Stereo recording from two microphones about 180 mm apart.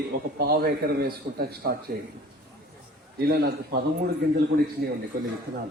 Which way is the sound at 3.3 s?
60° right (ahead or behind).